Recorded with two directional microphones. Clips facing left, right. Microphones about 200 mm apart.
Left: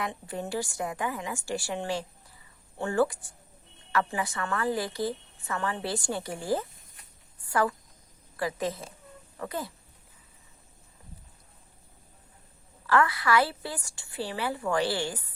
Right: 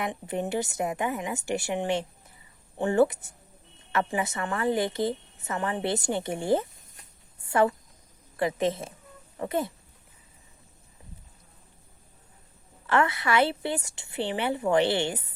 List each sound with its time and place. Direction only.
0.0 s a woman's voice: 20° right (ahead or behind)
12.9 s a woman's voice: 25° right (ahead or behind)